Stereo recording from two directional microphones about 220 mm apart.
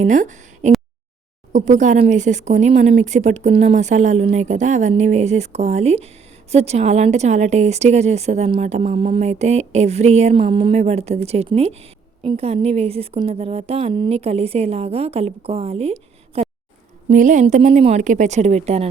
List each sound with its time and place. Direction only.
0.0 s a woman's voice: 35° right (ahead or behind)